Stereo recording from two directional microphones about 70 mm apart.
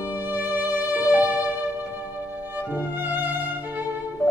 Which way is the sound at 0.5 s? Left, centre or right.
Right.